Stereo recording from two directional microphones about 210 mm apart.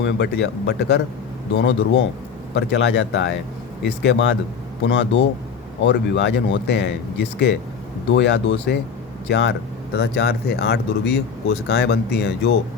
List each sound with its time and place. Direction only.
0.0 s speech: 55° left (ahead or behind)